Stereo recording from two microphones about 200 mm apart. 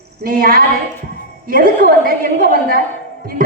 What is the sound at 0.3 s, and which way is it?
A woman's voice, 45° right (ahead or behind).